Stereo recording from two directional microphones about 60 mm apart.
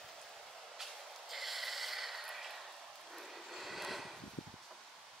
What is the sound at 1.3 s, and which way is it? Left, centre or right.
Snort, centre.